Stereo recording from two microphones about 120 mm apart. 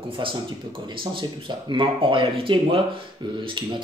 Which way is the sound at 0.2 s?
45° right (ahead or behind).